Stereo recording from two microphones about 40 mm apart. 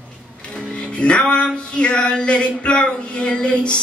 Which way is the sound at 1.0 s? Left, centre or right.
Left.